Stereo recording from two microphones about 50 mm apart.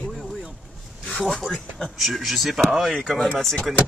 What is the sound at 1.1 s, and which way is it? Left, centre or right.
Speech, centre.